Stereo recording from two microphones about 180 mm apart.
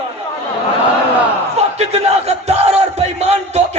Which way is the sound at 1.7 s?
35° right (ahead or behind).